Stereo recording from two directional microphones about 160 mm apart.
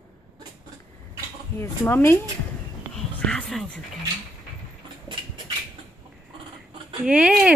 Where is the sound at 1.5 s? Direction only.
15° left (ahead or behind).